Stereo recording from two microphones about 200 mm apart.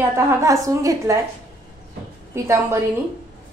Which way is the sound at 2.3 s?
15° right (ahead or behind).